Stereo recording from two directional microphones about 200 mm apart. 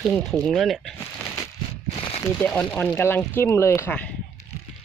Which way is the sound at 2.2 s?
10° left (ahead or behind).